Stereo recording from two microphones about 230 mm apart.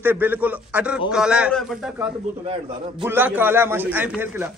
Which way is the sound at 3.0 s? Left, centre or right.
Centre.